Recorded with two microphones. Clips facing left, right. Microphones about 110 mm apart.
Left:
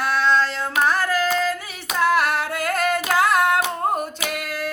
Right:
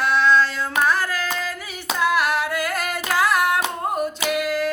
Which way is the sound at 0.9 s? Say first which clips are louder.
Left 2 dB; 50° left (ahead or behind).